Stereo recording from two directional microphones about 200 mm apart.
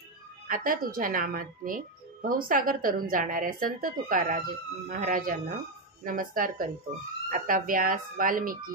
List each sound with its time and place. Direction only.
0.5 s a woman's voice: 45° right (ahead or behind)